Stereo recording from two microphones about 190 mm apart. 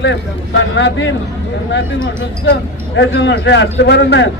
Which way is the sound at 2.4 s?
70° left (ahead or behind).